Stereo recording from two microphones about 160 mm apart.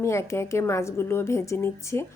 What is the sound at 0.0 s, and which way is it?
A woman's voice, 20° left (ahead or behind).